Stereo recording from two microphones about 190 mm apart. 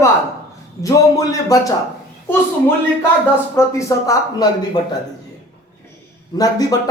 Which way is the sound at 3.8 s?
15° left (ahead or behind).